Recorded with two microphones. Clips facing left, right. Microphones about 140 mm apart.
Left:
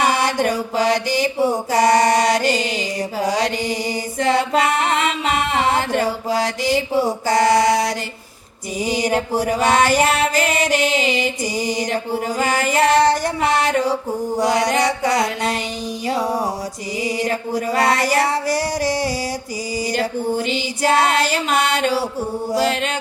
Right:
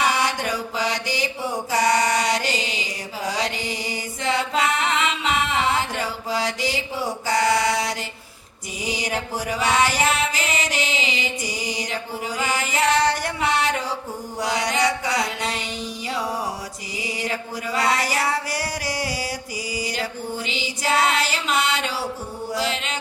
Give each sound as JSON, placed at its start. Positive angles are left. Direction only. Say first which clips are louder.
{"t": 0.0, "sound": "mantra", "louder": "left 5 dB", "side_deg": 45}
{"t": 18.8, "sound": "a sound", "louder": "left 8 dB", "side_deg": 40}
{"t": 19.7, "sound": "mantra", "louder": "left 8 dB", "side_deg": 45}